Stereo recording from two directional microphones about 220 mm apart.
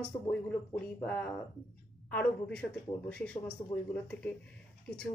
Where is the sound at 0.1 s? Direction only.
25° left (ahead or behind).